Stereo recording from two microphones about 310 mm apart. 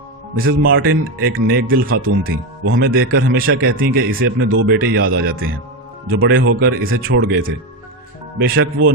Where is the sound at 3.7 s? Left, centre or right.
Right.